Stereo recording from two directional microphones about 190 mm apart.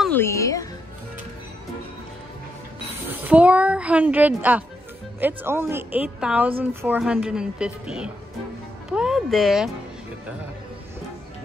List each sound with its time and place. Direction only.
0.1 s music: 15° left (ahead or behind)
3.1 s a woman's voice: 10° right (ahead or behind)
8.9 s music: centre (ahead or behind)